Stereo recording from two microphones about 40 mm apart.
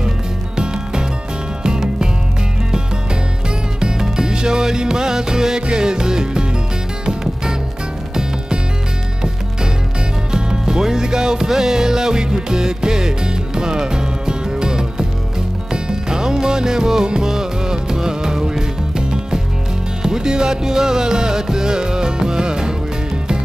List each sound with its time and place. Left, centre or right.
1.6 s music: centre
3.4 s music: centre
8.1 s music: centre
10.3 s music: centre